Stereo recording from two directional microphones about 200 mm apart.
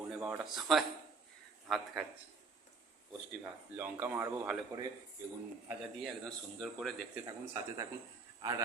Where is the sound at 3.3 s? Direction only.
10° right (ahead or behind).